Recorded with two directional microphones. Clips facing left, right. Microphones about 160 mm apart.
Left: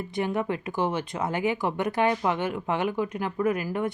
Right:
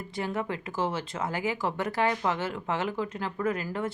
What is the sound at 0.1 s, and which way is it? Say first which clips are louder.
Speech: left 4 dB; 20° left (ahead or behind).